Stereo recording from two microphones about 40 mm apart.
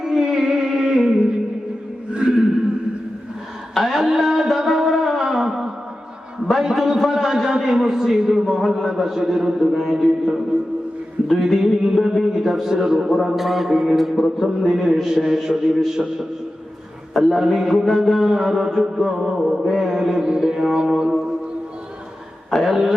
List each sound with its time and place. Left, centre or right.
0.0 s music: centre
2.1 s a sound: right
3.8 s a sound: centre
6.6 s a man's voice: centre
17.2 s a man's voice: centre
22.6 s a man's voice: centre